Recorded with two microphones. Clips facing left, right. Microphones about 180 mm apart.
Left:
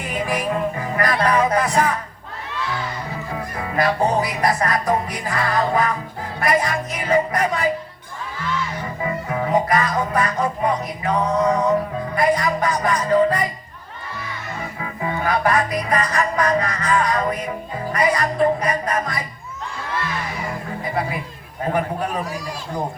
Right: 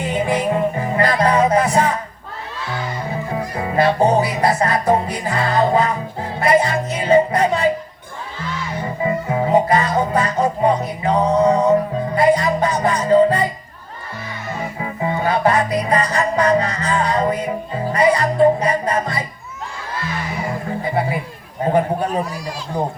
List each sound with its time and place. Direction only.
0.0 s music: 25° right (ahead or behind)
3.3 s music: 25° right (ahead or behind)
8.8 s music: 25° right (ahead or behind)
14.6 s music: 25° right (ahead or behind)
20.8 s a sound: 25° right (ahead or behind)